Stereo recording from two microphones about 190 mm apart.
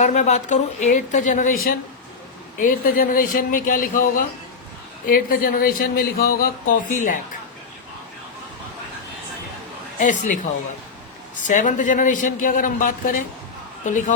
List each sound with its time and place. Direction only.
0.0 s speech: 40° left (ahead or behind)
5.0 s speech: 50° left (ahead or behind)
10.0 s speech: 40° left (ahead or behind)
11.4 s speech: 40° left (ahead or behind)